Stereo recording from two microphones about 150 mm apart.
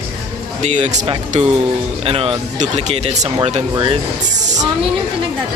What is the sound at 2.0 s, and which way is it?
Speech, 40° right (ahead or behind).